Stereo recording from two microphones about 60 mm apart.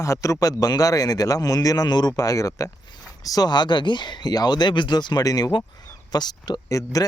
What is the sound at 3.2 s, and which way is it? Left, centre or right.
Speech, left.